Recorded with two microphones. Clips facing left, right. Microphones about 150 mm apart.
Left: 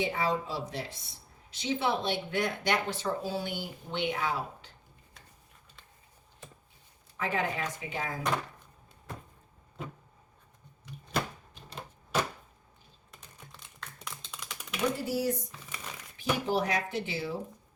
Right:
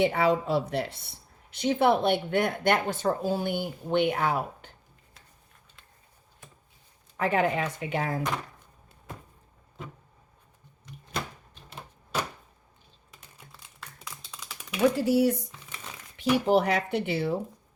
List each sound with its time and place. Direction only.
0.0 s speech: 65° right (ahead or behind)
7.2 s speech: 60° right (ahead or behind)
13.5 s typing: 5° right (ahead or behind)
14.9 s speech: 70° right (ahead or behind)